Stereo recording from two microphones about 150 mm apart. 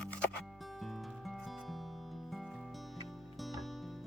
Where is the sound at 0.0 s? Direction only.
5° left (ahead or behind).